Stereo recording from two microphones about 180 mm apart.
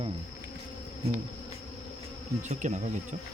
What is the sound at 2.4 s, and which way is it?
Insect, 40° right (ahead or behind).